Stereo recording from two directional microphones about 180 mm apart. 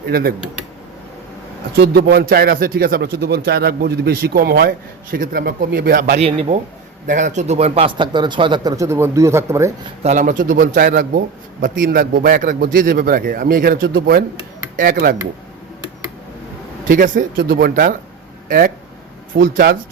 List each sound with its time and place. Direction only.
0.0 s a man's voice: 55° right (ahead or behind)
1.7 s a man's voice: 70° right (ahead or behind); by 6.2 s 50° right (ahead or behind)
6.2 s a man's voice: 35° right (ahead or behind); by 9.7 s 15° right (ahead or behind)
10.0 s a man's voice: 45° right (ahead or behind)
13.8 s speech: 70° right (ahead or behind)
14.8 s a man's voice: 55° right (ahead or behind)
16.9 s a man's voice: 50° right (ahead or behind)
17.3 s a man's voice: 65° right (ahead or behind)
19.3 s a man's voice: 60° right (ahead or behind)